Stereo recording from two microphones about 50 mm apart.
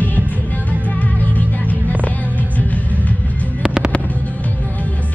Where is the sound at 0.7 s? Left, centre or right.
Left.